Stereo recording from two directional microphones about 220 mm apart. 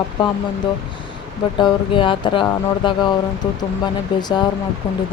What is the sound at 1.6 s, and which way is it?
Speech, 25° left (ahead or behind).